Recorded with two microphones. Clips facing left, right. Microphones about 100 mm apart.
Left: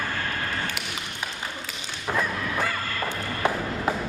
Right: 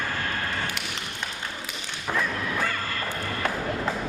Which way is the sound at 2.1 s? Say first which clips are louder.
Left 1 dB; 5° left (ahead or behind).